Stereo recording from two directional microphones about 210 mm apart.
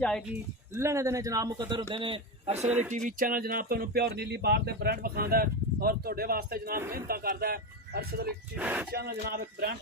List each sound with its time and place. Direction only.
0.0 s speech: 5° left (ahead or behind)
0.7 s a man's voice: 15° right (ahead or behind)
2.6 s a man's voice: 10° right (ahead or behind)
3.1 s speech: 40° right (ahead or behind)
8.5 s a man's voice: 10° right (ahead or behind)
8.9 s speech: 45° right (ahead or behind)